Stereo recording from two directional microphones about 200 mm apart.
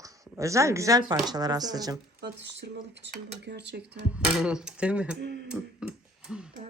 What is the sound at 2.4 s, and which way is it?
Speech, 60° right (ahead or behind).